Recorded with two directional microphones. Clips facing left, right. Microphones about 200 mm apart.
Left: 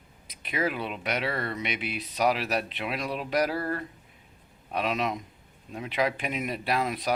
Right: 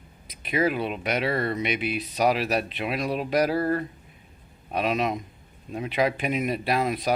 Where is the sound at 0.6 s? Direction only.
30° right (ahead or behind).